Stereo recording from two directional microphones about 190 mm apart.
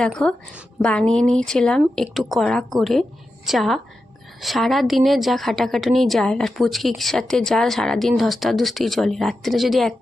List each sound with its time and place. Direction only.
0.0 s a woman's voice: 5° left (ahead or behind)